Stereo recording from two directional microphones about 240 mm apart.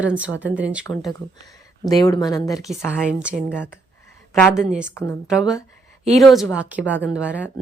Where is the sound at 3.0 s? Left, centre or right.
Centre.